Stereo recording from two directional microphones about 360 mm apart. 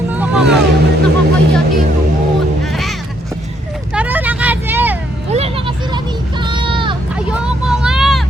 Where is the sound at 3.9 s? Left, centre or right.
Centre.